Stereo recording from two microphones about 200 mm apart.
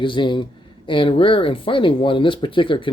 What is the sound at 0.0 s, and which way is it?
Speech, 25° left (ahead or behind).